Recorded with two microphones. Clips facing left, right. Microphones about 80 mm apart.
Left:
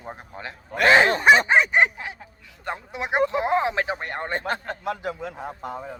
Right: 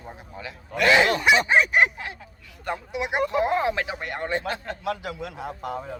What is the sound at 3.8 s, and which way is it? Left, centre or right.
A man's voice, left.